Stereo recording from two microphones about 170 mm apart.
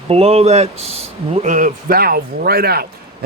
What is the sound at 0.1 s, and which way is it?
Speech, 35° right (ahead or behind).